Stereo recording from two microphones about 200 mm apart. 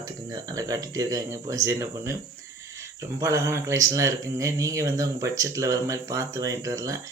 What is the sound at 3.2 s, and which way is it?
Speech, 15° right (ahead or behind).